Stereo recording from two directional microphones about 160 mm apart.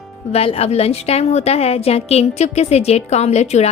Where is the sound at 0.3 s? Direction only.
40° left (ahead or behind).